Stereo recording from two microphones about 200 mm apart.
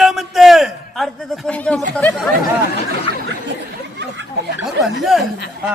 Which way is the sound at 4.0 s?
60° right (ahead or behind).